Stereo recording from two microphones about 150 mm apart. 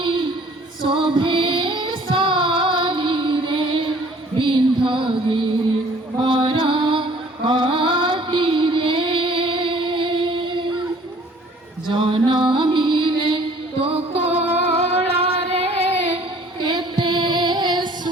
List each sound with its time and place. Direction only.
0.0 s a sound: 35° right (ahead or behind)
0.9 s child singing: 30° right (ahead or behind)
4.4 s music: 35° right (ahead or behind)
11.9 s music: 30° right (ahead or behind)
13.8 s female singing: 40° right (ahead or behind)
16.6 s child singing: 30° right (ahead or behind)